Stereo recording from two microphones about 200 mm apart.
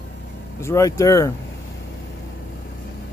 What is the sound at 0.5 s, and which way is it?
Speech, 15° left (ahead or behind).